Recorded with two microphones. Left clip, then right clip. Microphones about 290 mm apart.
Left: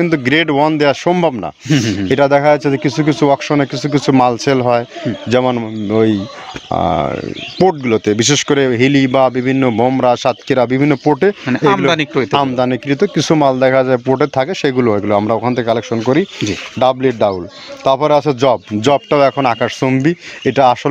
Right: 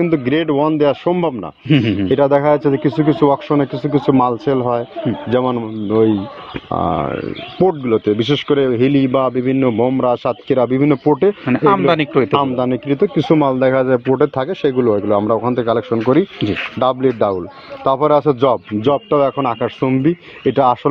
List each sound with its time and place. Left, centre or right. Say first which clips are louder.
0.0 s speech: left 3 dB; left
1.7 s speech: right 1 dB; left
2.0 s speech: left 3 dB; left
11.4 s speech: even; centre
12.3 s speech: left 2 dB; left